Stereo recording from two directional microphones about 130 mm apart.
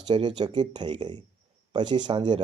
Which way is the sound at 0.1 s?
35° right (ahead or behind).